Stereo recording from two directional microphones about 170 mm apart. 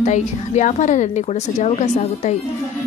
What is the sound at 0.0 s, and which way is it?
A woman's voice, 45° left (ahead or behind).